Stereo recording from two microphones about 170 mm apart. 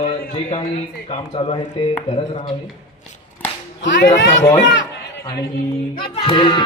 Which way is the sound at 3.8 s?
90° left.